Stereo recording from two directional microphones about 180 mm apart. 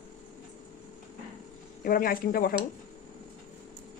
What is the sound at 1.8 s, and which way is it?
Speech, 50° left (ahead or behind).